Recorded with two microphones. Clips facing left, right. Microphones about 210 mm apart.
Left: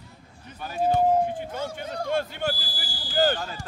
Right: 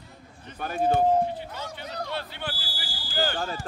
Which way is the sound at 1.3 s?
50° left (ahead or behind).